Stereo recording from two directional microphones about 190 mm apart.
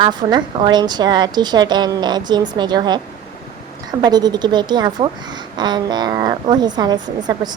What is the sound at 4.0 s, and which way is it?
A woman's voice, 20° right (ahead or behind).